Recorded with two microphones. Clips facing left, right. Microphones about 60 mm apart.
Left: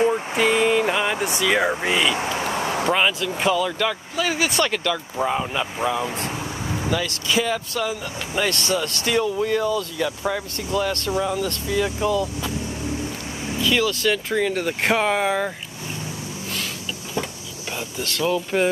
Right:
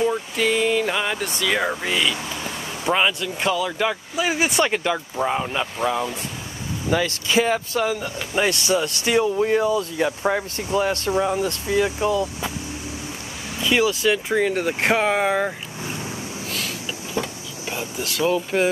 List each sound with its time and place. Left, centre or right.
0.4 s speech: centre
2.1 s a sound: left
2.9 s speech: centre
3.8 s speech: centre
5.1 s speech: centre
6.9 s speech: right
12.0 s speech: centre
13.6 s speech: right
17.6 s speech: centre